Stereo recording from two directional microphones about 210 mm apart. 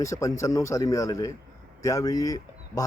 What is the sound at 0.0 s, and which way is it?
A man's voice, 15° left (ahead or behind).